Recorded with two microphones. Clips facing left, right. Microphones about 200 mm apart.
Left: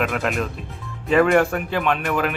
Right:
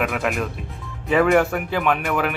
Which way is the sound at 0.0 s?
Centre (ahead or behind).